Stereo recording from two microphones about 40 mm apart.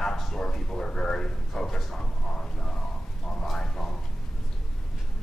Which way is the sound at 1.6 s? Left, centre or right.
Centre.